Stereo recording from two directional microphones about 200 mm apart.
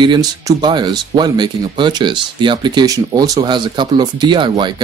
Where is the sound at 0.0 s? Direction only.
20° right (ahead or behind).